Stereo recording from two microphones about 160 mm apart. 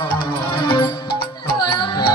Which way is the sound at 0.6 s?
30° left (ahead or behind).